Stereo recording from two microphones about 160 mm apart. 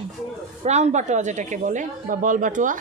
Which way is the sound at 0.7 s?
45° right (ahead or behind).